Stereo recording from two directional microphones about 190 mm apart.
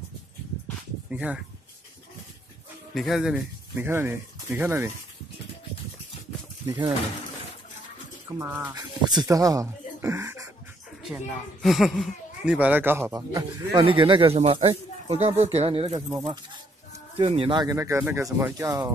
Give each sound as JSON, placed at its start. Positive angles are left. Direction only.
{"t": 1.1, "sound": "speech", "side_deg": -5}
{"t": 2.9, "sound": "speech", "side_deg": 0}
{"t": 6.6, "sound": "speech", "side_deg": -20}
{"t": 8.3, "sound": "speech", "side_deg": -15}
{"t": 11.0, "sound": "speech", "side_deg": 0}
{"t": 17.2, "sound": "speech", "side_deg": -25}